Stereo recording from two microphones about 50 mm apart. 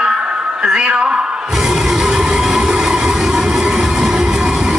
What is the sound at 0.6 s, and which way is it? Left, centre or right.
Music, centre.